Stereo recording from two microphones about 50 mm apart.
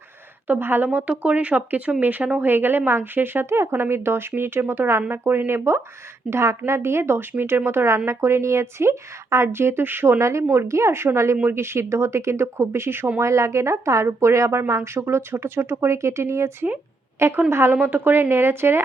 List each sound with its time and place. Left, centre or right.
0.4 s speech: right
0.9 s speech: right
3.5 s a woman's voice: right
6.3 s a woman's voice: right
9.8 s speech: right
10.2 s a woman's voice: right
10.5 s a woman's voice: right
13.1 s a woman's voice: right
14.7 s a woman's voice: right
17.7 s speech: right